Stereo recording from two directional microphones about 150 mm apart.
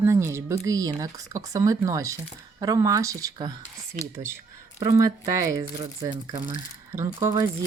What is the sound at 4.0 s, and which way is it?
Speech, 70° right (ahead or behind).